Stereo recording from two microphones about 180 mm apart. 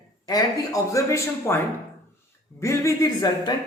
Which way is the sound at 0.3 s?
20° left (ahead or behind).